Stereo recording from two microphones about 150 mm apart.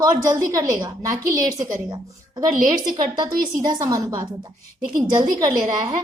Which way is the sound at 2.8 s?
30° right (ahead or behind).